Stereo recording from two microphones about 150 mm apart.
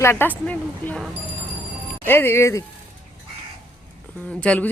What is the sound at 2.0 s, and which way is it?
Speech, 15° left (ahead or behind).